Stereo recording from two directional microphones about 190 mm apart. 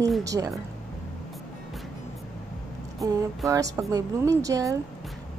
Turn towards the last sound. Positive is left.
turn(degrees=-15)  # may be behind; listen again after turning